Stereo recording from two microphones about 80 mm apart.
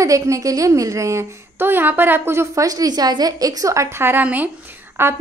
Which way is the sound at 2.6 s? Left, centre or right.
Right.